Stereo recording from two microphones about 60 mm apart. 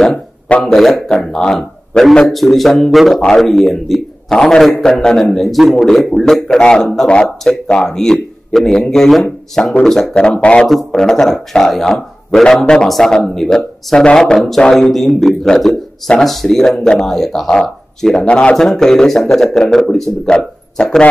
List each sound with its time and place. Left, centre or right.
0.7 s a man's voice: centre
10.1 s speech: centre